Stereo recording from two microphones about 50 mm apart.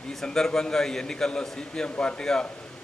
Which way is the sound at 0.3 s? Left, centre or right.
Centre.